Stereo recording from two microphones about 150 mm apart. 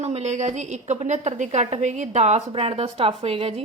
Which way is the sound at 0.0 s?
50° right (ahead or behind).